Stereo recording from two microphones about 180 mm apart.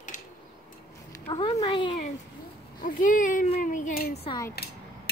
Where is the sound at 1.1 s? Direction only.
20° left (ahead or behind).